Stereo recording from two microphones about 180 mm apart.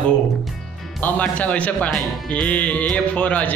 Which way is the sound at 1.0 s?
10° left (ahead or behind).